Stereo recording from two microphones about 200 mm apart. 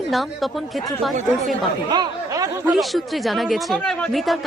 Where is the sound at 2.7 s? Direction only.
Centre (ahead or behind).